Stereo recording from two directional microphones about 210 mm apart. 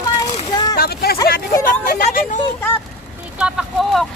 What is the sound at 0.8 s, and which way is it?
Speech, 45° left (ahead or behind).